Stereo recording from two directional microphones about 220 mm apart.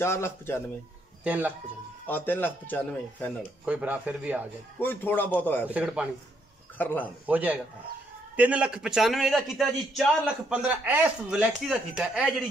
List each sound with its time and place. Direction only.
0.0 s a man's voice: 10° left (ahead or behind)
1.2 s speech: 5° right (ahead or behind)
2.0 s a man's voice: 10° left (ahead or behind)
3.6 s speech: 5° right (ahead or behind)
4.7 s a man's voice: 10° left (ahead or behind)
5.7 s speech: 5° right (ahead or behind)
6.8 s a man's voice: 10° left (ahead or behind)
7.2 s a man's voice: 5° right (ahead or behind)